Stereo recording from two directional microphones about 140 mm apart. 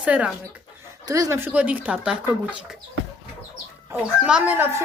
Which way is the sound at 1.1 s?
25° right (ahead or behind).